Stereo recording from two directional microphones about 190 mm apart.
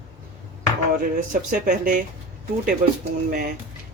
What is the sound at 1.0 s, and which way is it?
Speech, 45° right (ahead or behind).